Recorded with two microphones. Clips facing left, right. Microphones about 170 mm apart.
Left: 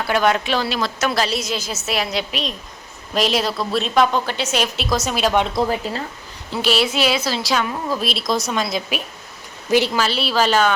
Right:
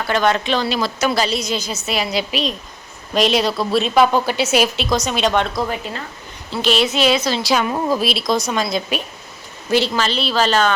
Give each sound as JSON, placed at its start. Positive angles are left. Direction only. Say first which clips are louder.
{"t": 0.0, "sound": "a woman's voice", "louder": "even", "side_deg": 5}
{"t": 5.5, "sound": "speech", "louder": "left 2 dB", "side_deg": 30}
{"t": 6.5, "sound": "a woman's voice", "louder": "right 1 dB", "side_deg": 10}
{"t": 7.5, "sound": "a woman's voice", "louder": "right 5 dB", "side_deg": -10}